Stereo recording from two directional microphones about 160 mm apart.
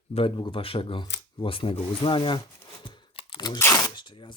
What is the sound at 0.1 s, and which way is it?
Speech, 35° left (ahead or behind).